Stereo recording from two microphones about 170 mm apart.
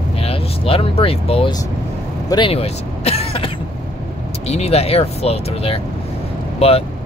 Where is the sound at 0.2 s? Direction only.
35° left (ahead or behind).